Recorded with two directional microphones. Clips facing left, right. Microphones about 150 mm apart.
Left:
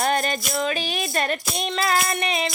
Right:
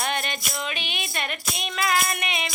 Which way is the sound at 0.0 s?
40° left (ahead or behind).